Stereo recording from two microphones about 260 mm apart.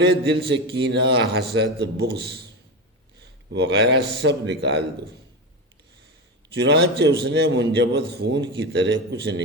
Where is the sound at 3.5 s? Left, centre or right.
Right.